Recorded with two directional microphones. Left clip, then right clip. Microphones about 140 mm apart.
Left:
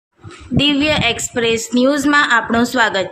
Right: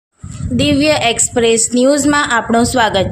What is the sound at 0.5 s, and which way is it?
A woman's voice, 35° right (ahead or behind).